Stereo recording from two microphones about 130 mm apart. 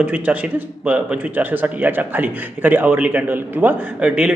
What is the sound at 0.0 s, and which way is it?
A man's voice, 10° right (ahead or behind).